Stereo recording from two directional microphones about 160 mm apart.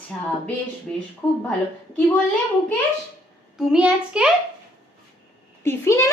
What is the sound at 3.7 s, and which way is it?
Speech, 5° right (ahead or behind).